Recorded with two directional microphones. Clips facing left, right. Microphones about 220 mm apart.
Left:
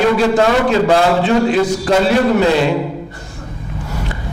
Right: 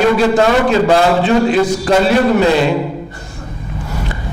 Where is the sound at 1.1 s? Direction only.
10° right (ahead or behind).